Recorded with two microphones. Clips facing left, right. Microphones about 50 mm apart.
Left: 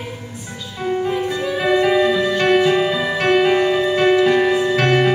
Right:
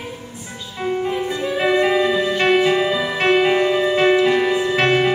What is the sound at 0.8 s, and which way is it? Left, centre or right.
Music, centre.